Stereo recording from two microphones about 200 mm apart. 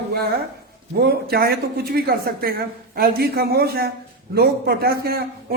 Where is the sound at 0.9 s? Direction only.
50° right (ahead or behind).